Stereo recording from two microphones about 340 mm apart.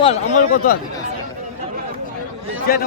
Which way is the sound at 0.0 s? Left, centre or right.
Centre.